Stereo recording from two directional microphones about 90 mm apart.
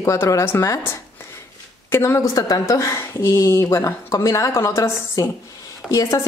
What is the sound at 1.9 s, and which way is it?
A woman's voice, 30° left (ahead or behind).